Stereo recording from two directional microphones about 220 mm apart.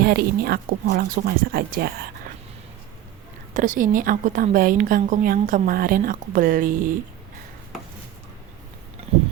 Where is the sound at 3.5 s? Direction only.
35° right (ahead or behind).